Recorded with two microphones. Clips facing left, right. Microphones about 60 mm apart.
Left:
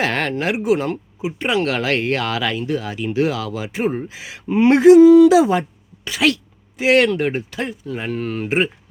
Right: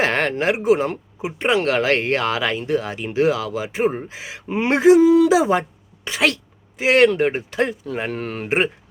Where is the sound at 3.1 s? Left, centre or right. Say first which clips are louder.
Right 2 dB; right.